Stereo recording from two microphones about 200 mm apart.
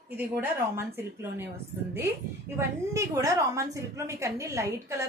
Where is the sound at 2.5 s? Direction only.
15° right (ahead or behind).